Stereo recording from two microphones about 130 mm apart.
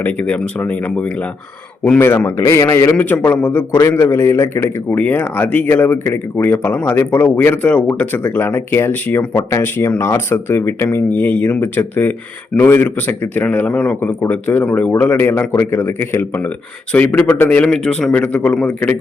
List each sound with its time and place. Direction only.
0.0 s a man's voice: 15° left (ahead or behind)